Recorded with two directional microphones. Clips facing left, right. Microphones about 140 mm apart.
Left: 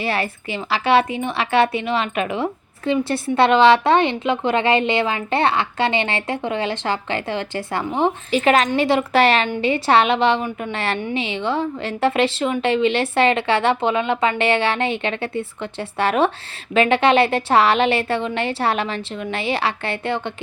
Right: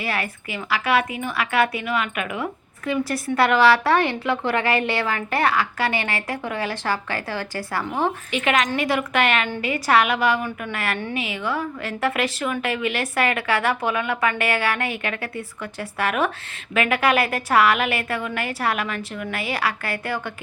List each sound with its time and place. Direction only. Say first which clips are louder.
0.0 s a woman's voice: left 4 dB; 30° left (ahead or behind)
8.3 s a woman's voice: left 7 dB; 35° left (ahead or behind)